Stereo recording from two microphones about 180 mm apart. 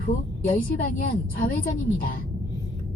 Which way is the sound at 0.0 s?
50° left (ahead or behind).